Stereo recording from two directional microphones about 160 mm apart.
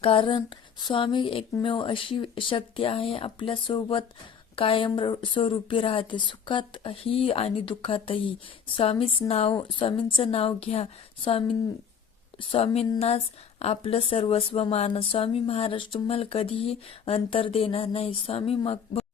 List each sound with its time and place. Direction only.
0.0 s a woman's voice: 35° left (ahead or behind)